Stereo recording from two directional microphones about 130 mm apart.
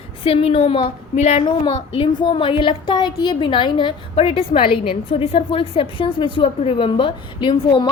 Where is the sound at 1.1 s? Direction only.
60° left (ahead or behind).